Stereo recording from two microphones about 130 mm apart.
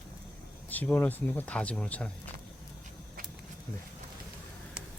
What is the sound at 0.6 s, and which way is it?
Speech, 15° left (ahead or behind).